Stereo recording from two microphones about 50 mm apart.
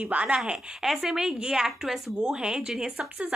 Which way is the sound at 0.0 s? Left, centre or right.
Right.